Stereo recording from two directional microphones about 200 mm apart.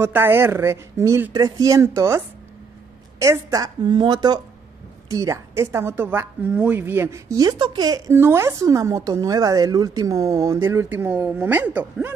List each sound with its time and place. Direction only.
0.0 s a woman's voice: 10° right (ahead or behind)